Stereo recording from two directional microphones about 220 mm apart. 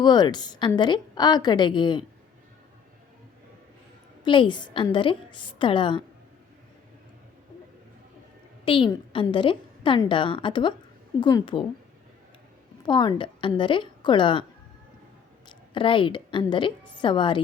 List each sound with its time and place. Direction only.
0.0 s a woman's voice: 20° left (ahead or behind)
4.2 s a woman's voice: 20° left (ahead or behind)
8.6 s a woman's voice: 20° left (ahead or behind)
12.8 s a woman's voice: 20° left (ahead or behind)
15.4 s a woman's voice: 20° left (ahead or behind)